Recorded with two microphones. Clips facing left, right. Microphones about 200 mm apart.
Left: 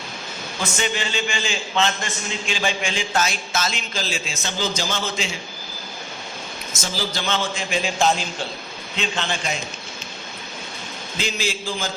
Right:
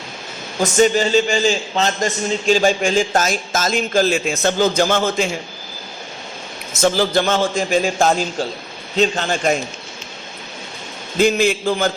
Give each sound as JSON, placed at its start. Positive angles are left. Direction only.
{"t": 0.6, "sound": "a man's voice", "side_deg": -40}
{"t": 6.8, "sound": "a man's voice", "side_deg": -55}
{"t": 11.2, "sound": "a man's voice", "side_deg": -55}